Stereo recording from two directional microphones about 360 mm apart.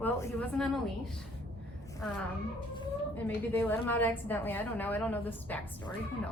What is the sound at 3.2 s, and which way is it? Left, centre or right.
Speech, centre.